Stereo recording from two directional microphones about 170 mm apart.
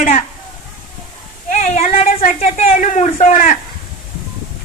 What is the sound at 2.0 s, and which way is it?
Speech, 45° left (ahead or behind).